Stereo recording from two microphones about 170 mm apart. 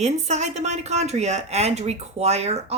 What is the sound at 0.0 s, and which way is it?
Speech, 40° right (ahead or behind).